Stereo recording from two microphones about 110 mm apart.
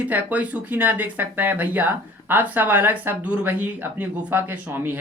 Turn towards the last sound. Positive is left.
turn(degrees=-20)  # may be behind; listen again after turning